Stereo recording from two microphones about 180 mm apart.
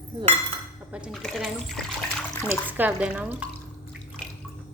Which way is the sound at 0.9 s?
Centre (ahead or behind).